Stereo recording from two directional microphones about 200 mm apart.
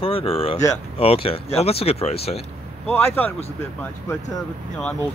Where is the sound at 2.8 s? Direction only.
10° left (ahead or behind).